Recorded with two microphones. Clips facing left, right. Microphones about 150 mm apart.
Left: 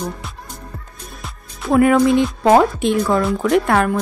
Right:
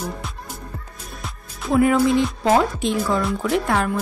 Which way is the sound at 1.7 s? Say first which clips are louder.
Left 4 dB; 60° left (ahead or behind).